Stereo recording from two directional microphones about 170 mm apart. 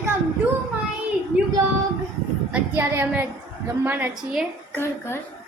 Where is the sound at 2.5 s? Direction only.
10° right (ahead or behind).